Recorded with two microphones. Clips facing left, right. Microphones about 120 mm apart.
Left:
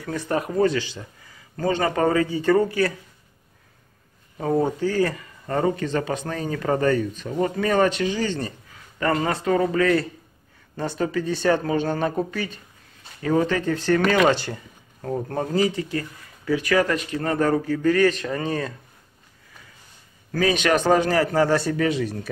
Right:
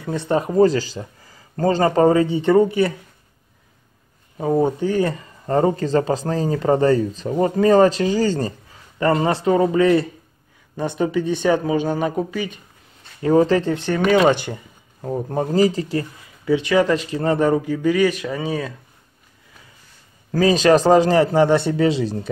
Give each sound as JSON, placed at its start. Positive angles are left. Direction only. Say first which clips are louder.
{"t": 0.0, "sound": "speech", "louder": "right 4 dB", "side_deg": -25}
{"t": 4.4, "sound": "speech", "louder": "right 3 dB", "side_deg": -15}
{"t": 9.0, "sound": "speech", "louder": "right 5 dB", "side_deg": -25}
{"t": 13.2, "sound": "speech", "louder": "right 6 dB", "side_deg": -30}
{"t": 15.5, "sound": "speech", "louder": "right 5 dB", "side_deg": -35}
{"t": 20.2, "sound": "speech", "louder": "right 6 dB", "side_deg": -35}